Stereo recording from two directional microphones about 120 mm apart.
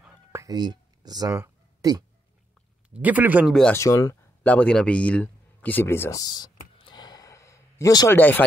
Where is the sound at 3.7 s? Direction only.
25° left (ahead or behind).